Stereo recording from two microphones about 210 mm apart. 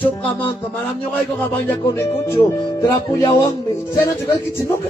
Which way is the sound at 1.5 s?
10° left (ahead or behind).